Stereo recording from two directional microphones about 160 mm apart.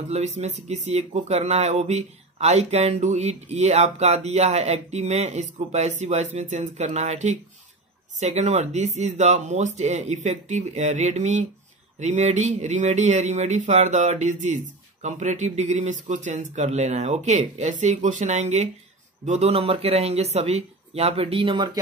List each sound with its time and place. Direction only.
0.1 s speech: 45° right (ahead or behind)